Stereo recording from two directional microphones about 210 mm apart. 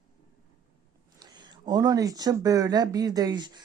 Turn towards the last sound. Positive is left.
turn(degrees=-20)  # may be behind; listen again after turning